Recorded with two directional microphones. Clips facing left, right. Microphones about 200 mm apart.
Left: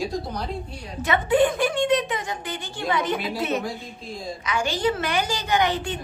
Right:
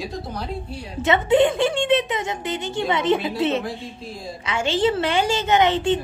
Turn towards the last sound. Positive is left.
turn(degrees=-25)  # may be behind; listen again after turning